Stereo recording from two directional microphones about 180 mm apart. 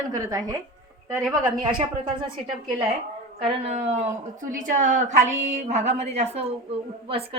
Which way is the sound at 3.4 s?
35° right (ahead or behind).